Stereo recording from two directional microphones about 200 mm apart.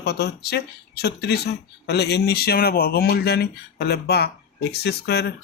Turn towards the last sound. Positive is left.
turn(degrees=55)  # may be behind; listen again after turning